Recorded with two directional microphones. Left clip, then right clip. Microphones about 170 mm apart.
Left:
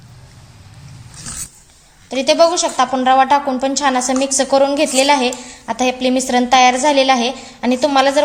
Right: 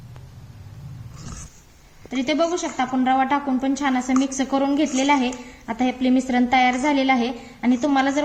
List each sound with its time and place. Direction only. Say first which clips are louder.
2.0 s a woman's voice: left 9 dB; 55° left (ahead or behind)